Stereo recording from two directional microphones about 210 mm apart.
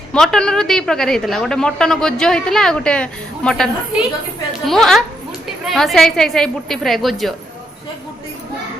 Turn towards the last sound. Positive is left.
turn(degrees=0)  # may be behind; listen again after turning